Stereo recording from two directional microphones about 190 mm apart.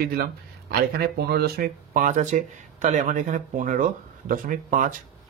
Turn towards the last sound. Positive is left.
turn(degrees=-45)  # may be behind; listen again after turning